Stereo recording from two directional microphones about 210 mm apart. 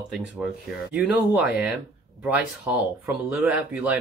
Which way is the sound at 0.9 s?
5° right (ahead or behind).